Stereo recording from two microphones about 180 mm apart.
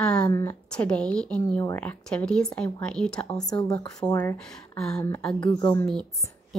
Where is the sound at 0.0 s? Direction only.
5° left (ahead or behind).